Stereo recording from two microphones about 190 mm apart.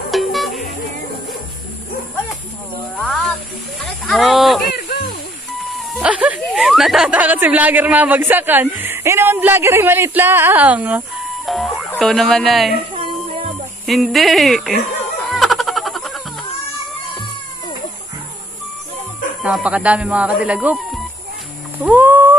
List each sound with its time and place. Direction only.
0.1 s music: centre (ahead or behind)
3.0 s snake: 5° left (ahead or behind)
3.8 s livestock: centre (ahead or behind)
4.7 s a sound: 55° left (ahead or behind)
5.9 s speech: 5° right (ahead or behind)
12.9 s music: 30° right (ahead or behind)
13.8 s speech: centre (ahead or behind)
15.3 s a sound: centre (ahead or behind)
19.4 s speech: 5° right (ahead or behind)
21.7 s a sound: 10° right (ahead or behind)